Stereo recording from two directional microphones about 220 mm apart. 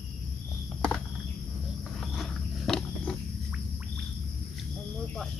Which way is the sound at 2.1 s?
Centre (ahead or behind).